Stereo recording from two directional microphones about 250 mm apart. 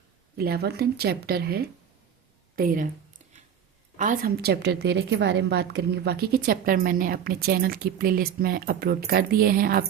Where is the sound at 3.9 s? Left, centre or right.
Right.